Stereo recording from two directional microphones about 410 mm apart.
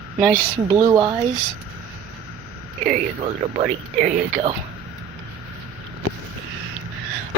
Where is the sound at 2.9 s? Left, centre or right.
Centre.